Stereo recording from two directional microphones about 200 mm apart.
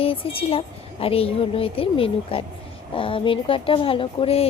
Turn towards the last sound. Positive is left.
turn(degrees=30)  # may be behind; listen again after turning